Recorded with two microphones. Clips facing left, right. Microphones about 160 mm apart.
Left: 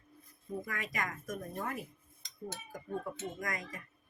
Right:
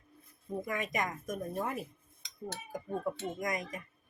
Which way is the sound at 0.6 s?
20° right (ahead or behind).